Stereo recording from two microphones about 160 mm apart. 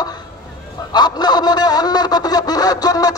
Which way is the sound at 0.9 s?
25° left (ahead or behind).